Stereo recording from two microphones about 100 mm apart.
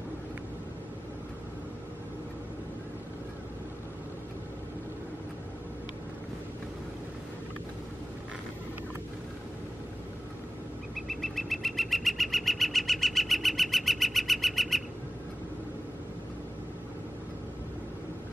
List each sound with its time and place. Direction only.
11.1 s bird: centre (ahead or behind)